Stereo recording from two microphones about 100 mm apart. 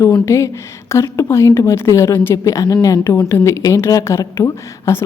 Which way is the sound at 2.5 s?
35° left (ahead or behind).